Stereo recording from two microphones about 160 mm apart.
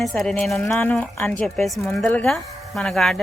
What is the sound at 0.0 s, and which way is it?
Speech, centre (ahead or behind).